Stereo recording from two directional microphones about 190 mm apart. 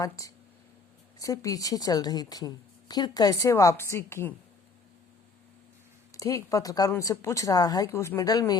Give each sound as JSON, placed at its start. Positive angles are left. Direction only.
{"t": 0.0, "sound": "a woman's voice", "side_deg": 15}
{"t": 6.1, "sound": "speech", "side_deg": 15}